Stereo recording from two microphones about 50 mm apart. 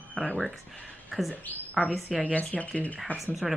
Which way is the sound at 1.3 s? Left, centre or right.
Left.